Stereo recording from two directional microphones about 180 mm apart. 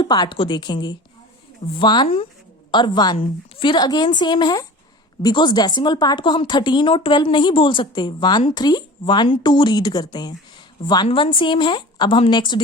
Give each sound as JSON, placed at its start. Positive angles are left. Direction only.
{"t": 0.0, "sound": "speech", "side_deg": 25}